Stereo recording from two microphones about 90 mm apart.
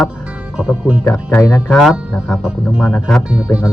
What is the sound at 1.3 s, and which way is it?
Speech, 30° left (ahead or behind).